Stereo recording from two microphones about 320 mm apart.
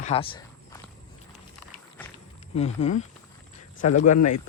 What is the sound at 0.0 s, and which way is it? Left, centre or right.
Walk, centre.